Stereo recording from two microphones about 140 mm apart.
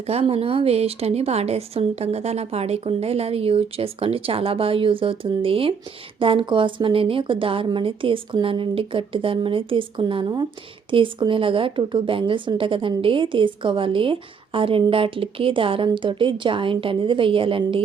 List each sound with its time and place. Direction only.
0.0 s a woman's voice: 45° right (ahead or behind)